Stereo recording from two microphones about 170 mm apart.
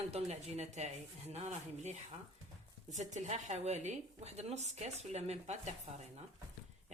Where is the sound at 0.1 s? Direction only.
40° right (ahead or behind).